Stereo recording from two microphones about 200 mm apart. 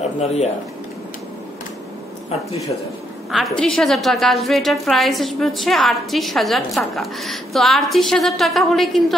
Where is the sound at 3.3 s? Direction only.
Centre (ahead or behind).